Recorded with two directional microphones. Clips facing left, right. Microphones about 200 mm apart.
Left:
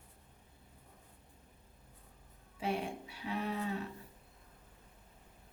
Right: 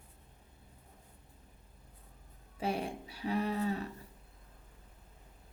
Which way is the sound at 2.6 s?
40° right (ahead or behind).